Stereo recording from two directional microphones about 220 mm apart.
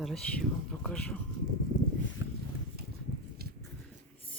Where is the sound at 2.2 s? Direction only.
15° right (ahead or behind).